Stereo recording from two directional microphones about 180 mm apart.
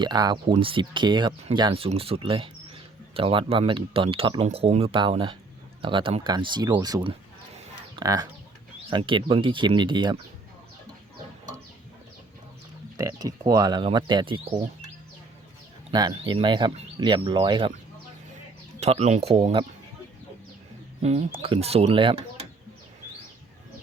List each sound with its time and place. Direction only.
0.0 s speech: 25° right (ahead or behind)
13.0 s speech: 20° right (ahead or behind)
15.9 s speech: 25° right (ahead or behind)
18.8 s speech: 35° right (ahead or behind)
21.0 s speech: 35° right (ahead or behind)